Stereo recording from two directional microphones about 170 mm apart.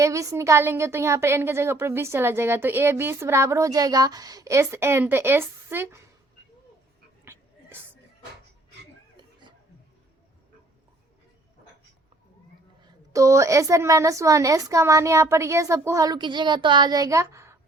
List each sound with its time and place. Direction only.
0.0 s a woman's voice: 20° right (ahead or behind)
12.8 s a woman's voice: 20° right (ahead or behind)